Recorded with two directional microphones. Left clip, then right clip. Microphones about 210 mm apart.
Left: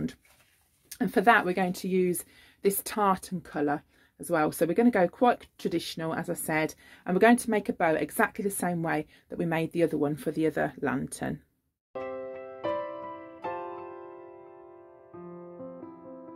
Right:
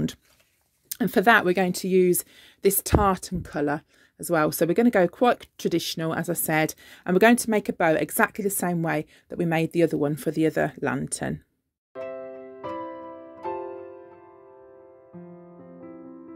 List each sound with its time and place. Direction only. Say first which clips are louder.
0.8 s speech: right 3 dB; 50° right (ahead or behind)
11.9 s music: right 1 dB; centre (ahead or behind)